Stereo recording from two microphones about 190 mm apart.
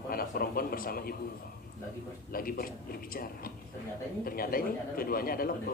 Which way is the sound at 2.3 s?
50° left (ahead or behind).